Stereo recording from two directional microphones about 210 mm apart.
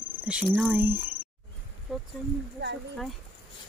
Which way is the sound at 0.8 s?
10° right (ahead or behind).